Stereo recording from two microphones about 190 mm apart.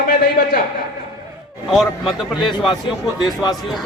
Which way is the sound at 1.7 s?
Centre (ahead or behind).